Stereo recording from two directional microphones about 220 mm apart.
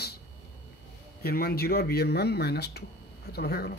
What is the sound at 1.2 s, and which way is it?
A man's voice, 45° left (ahead or behind).